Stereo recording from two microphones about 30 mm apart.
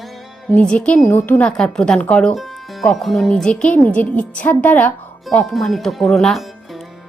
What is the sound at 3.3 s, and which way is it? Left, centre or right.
Speech, left.